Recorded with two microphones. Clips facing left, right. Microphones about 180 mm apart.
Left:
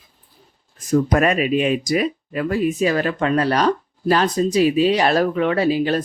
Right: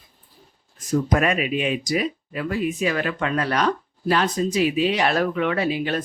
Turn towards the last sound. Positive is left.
turn(degrees=35)  # may be behind; listen again after turning